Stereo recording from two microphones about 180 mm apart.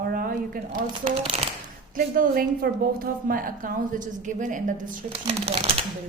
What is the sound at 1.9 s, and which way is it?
A woman's voice, 50° right (ahead or behind).